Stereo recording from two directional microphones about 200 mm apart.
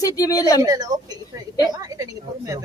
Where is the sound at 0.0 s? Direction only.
15° left (ahead or behind).